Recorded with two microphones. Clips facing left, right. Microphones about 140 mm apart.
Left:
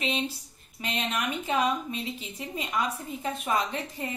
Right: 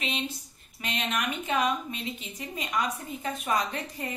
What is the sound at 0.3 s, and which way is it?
A woman's voice, 30° left (ahead or behind).